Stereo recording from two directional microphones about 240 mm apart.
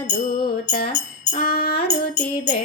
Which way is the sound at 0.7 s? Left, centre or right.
Left.